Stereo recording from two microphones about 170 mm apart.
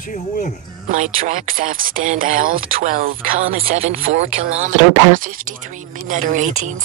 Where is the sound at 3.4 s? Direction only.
35° right (ahead or behind).